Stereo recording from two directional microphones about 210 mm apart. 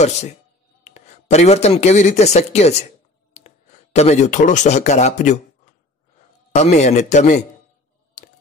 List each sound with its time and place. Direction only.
0.8 s speech: 35° left (ahead or behind)
6.5 s a man's voice: 35° left (ahead or behind)
8.2 s scissors: 35° left (ahead or behind)